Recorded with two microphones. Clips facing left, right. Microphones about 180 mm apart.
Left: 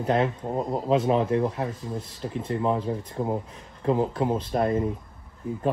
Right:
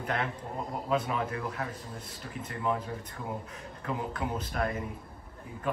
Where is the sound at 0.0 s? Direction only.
25° left (ahead or behind).